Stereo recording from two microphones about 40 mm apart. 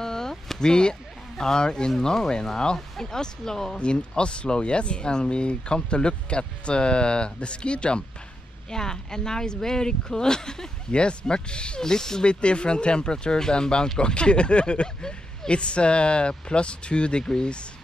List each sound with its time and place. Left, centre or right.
0.0 s a sound: centre
1.4 s speech: centre
3.7 s speech: left
12.3 s speech: left